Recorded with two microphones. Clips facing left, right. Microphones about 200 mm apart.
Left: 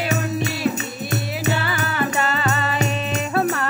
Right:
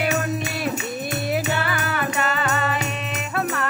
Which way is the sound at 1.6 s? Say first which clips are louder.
Left 2 dB; 30° left (ahead or behind).